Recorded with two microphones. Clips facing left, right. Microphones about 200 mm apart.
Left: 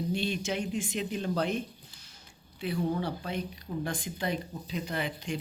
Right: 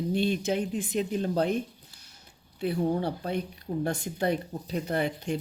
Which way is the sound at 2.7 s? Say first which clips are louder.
Right 3 dB; 45° right (ahead or behind).